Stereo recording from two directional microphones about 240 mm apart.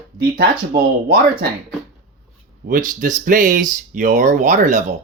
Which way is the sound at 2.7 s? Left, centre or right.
Right.